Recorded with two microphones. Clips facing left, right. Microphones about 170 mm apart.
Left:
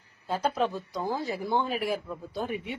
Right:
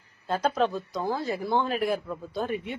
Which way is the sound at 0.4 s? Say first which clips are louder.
Right 2 dB; 10° left (ahead or behind).